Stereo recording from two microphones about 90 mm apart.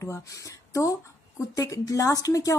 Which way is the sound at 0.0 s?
35° left (ahead or behind).